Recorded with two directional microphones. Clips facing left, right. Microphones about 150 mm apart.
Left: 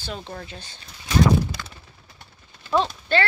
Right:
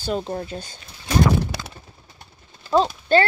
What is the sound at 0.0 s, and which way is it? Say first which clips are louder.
Speech: right 9 dB; 40° right (ahead or behind).